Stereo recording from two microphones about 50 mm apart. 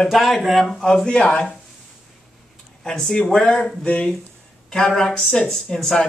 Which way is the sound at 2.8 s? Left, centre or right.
Centre.